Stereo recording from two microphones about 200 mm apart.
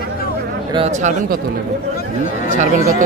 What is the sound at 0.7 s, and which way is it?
Speech, 35° right (ahead or behind).